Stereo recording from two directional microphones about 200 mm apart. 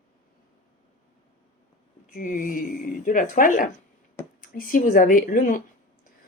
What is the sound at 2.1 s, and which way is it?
Speech, 40° left (ahead or behind).